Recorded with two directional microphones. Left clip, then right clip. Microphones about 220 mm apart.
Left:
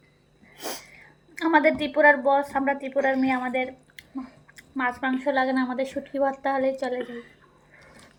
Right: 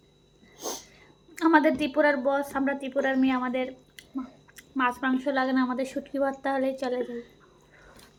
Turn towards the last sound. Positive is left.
turn(degrees=-5)  # may be behind; listen again after turning